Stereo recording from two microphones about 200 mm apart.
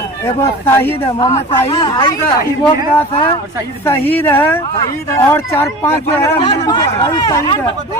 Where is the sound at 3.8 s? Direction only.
10° left (ahead or behind).